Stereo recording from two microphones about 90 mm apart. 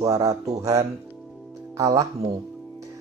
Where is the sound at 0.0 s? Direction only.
40° right (ahead or behind).